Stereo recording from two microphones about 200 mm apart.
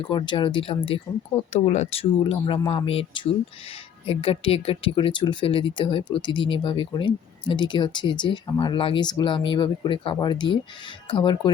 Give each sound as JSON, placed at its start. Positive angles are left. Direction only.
{"t": 0.1, "sound": "speech", "side_deg": 25}